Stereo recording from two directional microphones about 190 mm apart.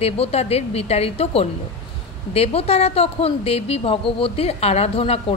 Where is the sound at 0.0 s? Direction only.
35° left (ahead or behind).